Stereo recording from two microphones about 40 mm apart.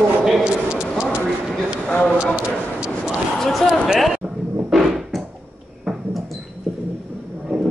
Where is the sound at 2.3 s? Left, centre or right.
Right.